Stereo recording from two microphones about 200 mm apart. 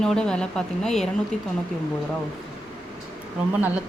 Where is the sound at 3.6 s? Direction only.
10° right (ahead or behind).